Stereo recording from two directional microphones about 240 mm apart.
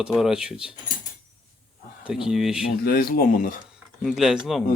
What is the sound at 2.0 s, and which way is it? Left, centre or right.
Speech, centre.